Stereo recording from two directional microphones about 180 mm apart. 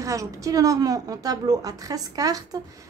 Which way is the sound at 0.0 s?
20° right (ahead or behind).